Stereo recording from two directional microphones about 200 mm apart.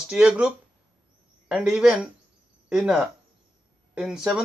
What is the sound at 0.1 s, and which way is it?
Speech, 5° right (ahead or behind).